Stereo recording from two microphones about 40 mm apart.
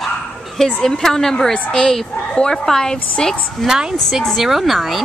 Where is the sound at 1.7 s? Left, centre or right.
Centre.